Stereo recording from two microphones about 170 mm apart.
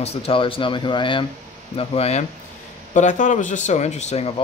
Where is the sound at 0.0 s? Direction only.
35° left (ahead or behind).